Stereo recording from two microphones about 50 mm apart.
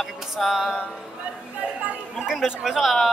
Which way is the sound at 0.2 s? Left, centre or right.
Centre.